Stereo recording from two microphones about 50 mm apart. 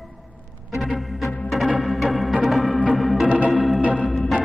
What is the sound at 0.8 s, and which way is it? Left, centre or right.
Music, centre.